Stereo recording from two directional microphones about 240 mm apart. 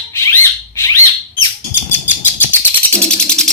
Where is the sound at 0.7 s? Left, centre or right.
Centre.